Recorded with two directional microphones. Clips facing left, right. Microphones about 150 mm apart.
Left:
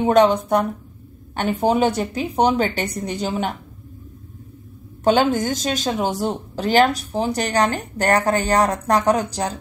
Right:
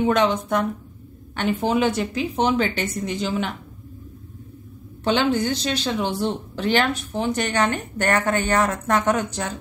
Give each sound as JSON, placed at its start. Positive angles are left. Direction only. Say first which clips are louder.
{"t": 0.0, "sound": "speech", "louder": "left 4 dB", "side_deg": 35}
{"t": 5.0, "sound": "speech", "louder": "left 3 dB", "side_deg": 45}